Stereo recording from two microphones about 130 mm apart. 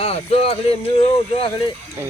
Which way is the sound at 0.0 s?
50° left (ahead or behind).